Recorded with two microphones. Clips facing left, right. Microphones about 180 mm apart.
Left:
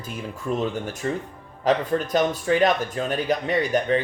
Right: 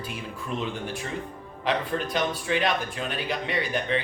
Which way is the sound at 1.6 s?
40° left (ahead or behind).